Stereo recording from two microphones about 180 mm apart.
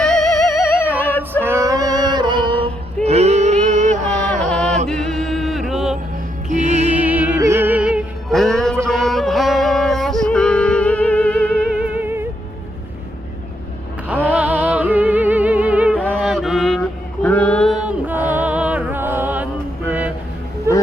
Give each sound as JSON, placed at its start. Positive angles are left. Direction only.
{"t": 0.3, "sound": "music", "side_deg": 15}
{"t": 1.5, "sound": "a sound", "side_deg": -15}
{"t": 4.4, "sound": "music", "side_deg": 5}
{"t": 6.5, "sound": "music", "side_deg": -40}
{"t": 7.0, "sound": "music", "side_deg": -10}
{"t": 11.6, "sound": "music", "side_deg": -5}
{"t": 14.1, "sound": "music", "side_deg": -10}
{"t": 17.2, "sound": "a sound", "side_deg": 10}
{"t": 19.9, "sound": "music", "side_deg": -10}